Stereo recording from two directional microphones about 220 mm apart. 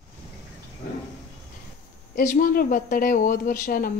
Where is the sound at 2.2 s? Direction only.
35° left (ahead or behind).